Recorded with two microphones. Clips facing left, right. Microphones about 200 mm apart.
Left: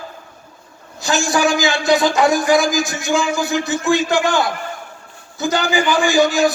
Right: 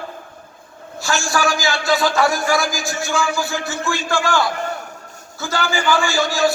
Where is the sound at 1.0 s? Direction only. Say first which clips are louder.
Left 3 dB; 20° left (ahead or behind).